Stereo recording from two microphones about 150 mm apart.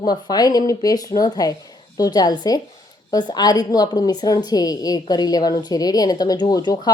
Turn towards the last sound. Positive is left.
turn(degrees=25)  # may be behind; listen again after turning